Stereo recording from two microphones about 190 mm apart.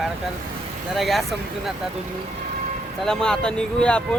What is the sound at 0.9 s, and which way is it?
Speech, centre (ahead or behind).